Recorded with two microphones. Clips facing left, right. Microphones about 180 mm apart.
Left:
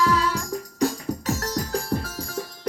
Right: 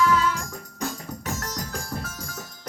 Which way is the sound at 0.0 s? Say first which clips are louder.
Even; 35° left (ahead or behind).